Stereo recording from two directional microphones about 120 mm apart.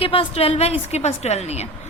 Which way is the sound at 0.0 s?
50° left (ahead or behind).